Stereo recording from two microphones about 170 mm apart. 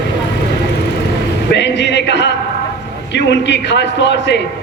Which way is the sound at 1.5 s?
90° left.